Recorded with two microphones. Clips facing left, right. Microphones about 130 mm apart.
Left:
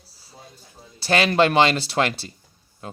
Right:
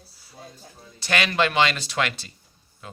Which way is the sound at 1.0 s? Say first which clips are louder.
Left 5 dB; 35° left (ahead or behind).